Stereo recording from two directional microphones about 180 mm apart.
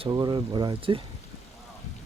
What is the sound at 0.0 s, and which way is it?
Speech, 25° right (ahead or behind).